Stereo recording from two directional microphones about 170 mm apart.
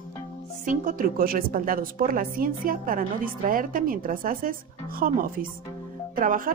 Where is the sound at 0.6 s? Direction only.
50° right (ahead or behind).